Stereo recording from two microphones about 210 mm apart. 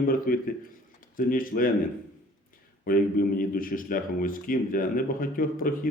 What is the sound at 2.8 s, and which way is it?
A man's voice, 40° left (ahead or behind).